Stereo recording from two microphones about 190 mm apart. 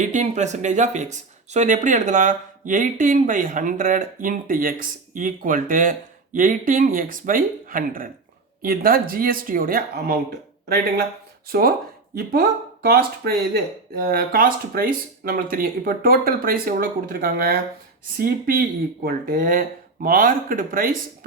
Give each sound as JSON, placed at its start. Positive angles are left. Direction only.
{"t": 0.0, "sound": "speech", "side_deg": -40}
{"t": 11.4, "sound": "speech", "side_deg": -50}